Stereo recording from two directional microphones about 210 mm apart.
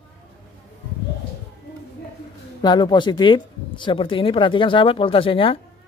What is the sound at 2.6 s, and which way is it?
Speech, 20° left (ahead or behind).